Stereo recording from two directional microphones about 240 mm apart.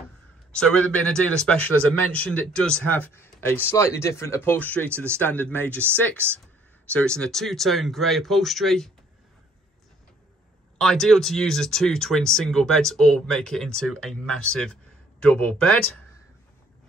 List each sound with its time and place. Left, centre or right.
0.6 s speech: centre
4.9 s speech: centre
5.2 s speech: centre
6.9 s speech: centre
10.8 s speech: centre